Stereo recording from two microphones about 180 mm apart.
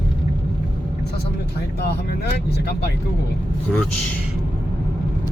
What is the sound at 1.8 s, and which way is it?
Speech, 65° left (ahead or behind).